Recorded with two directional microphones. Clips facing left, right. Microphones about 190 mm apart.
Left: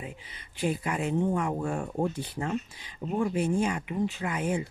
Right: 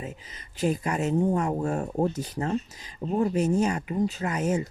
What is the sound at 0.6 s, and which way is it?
Speech, 40° right (ahead or behind).